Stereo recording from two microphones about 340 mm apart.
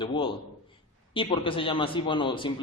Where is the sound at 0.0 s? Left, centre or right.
Centre.